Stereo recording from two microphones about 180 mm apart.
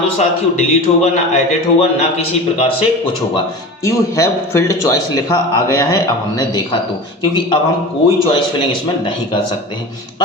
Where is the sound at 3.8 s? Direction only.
15° left (ahead or behind).